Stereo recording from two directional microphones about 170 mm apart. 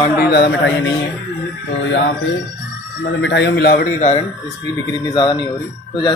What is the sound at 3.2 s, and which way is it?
A man's voice, 90° left.